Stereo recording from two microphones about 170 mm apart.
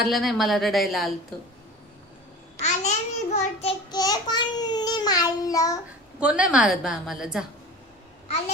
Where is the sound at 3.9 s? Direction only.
20° left (ahead or behind).